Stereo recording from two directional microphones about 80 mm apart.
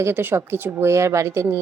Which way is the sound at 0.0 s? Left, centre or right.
Right.